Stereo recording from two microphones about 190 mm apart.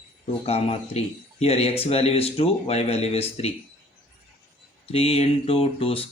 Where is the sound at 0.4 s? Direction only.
30° left (ahead or behind).